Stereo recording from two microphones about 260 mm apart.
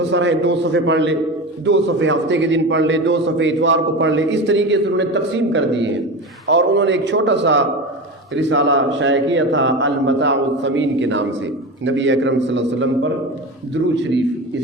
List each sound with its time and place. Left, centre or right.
0.0 s a man's voice: right